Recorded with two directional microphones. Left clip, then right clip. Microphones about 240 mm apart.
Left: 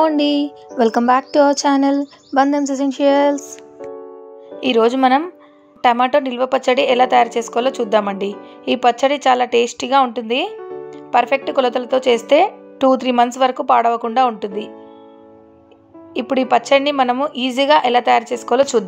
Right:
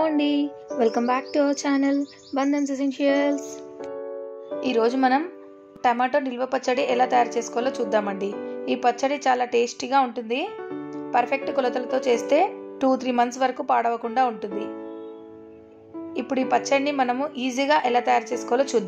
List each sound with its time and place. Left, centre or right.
0.0 s speech: left
4.6 s speech: left
16.2 s speech: left